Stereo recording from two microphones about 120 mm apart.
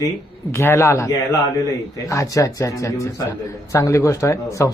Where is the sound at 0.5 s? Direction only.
20° left (ahead or behind).